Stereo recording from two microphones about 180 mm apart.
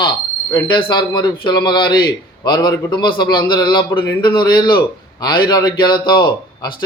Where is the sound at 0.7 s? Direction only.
25° left (ahead or behind).